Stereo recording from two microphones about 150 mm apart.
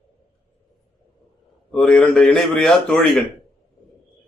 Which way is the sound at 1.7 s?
5° left (ahead or behind).